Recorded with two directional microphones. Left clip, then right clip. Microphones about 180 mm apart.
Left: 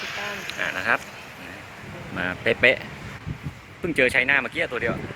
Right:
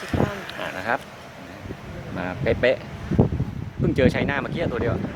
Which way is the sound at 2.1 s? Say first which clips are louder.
Left 1 dB; centre (ahead or behind).